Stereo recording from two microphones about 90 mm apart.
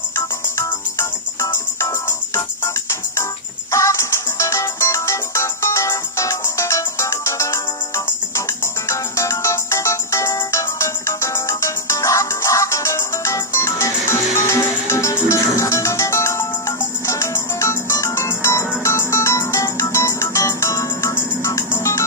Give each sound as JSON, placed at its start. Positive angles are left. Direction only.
{"t": 1.8, "sound": "organ", "side_deg": 35}
{"t": 3.7, "sound": "music", "side_deg": 35}